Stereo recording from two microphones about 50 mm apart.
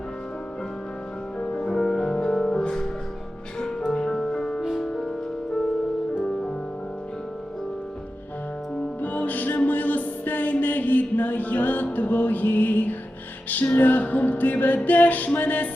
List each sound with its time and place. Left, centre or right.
1.4 s music: left
3.9 s music: centre
4.7 s music: centre
9.0 s music: left